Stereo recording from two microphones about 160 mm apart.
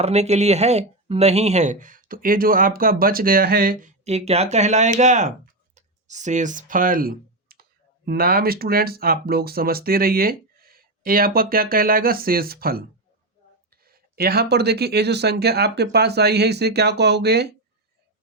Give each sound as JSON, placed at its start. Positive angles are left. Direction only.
{"t": 0.0, "sound": "speech", "side_deg": -40}
{"t": 4.0, "sound": "speech", "side_deg": -40}
{"t": 5.7, "sound": "clicking", "side_deg": -45}
{"t": 8.0, "sound": "speech", "side_deg": -65}